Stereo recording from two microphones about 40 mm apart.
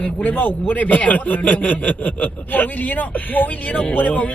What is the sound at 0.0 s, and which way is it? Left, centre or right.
A man's voice, left.